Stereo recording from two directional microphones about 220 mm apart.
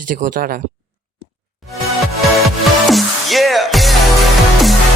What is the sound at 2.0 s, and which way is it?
Music, centre (ahead or behind).